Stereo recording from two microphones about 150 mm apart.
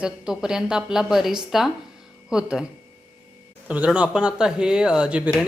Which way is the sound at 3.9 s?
5° right (ahead or behind).